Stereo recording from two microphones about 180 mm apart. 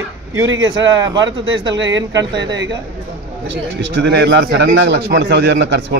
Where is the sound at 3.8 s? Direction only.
85° right.